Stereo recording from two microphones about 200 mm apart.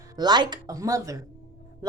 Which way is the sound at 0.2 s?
20° right (ahead or behind).